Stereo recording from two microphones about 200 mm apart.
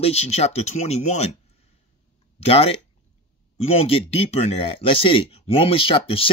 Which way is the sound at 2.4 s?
30° left (ahead or behind).